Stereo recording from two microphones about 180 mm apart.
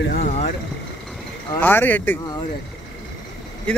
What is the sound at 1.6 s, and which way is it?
Speech, 10° left (ahead or behind).